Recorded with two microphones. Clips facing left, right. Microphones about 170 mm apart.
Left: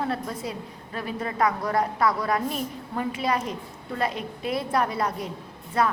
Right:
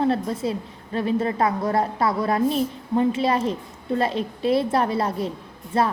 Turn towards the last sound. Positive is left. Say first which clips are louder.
# right 2 dB
turn(degrees=-30)  # may be behind; listen again after turning